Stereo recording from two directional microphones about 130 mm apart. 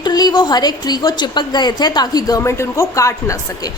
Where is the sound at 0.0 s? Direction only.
30° left (ahead or behind).